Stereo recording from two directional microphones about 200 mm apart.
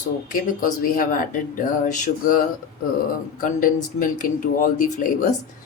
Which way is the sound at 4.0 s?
40° left (ahead or behind).